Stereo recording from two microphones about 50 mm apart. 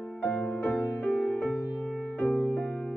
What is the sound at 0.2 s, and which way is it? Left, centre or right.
Music, left.